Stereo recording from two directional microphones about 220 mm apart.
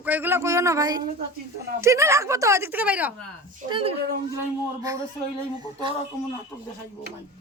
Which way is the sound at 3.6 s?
20° right (ahead or behind).